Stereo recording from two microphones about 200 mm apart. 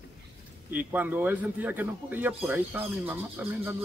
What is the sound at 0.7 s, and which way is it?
Speech, 10° right (ahead or behind).